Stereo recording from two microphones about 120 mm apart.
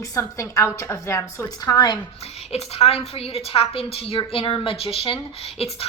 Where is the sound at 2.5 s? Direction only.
55° left (ahead or behind).